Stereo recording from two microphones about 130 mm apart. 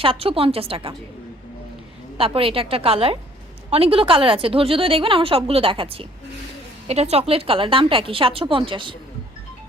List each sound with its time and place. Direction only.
0.0 s a woman's voice: 45° right (ahead or behind)
2.1 s a woman's voice: 45° right (ahead or behind)
6.8 s a woman's voice: 55° right (ahead or behind)